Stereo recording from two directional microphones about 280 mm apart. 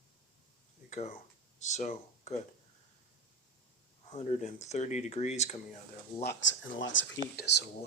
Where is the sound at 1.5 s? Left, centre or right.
Left.